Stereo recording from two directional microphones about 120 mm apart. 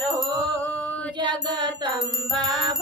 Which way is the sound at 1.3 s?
40° right (ahead or behind).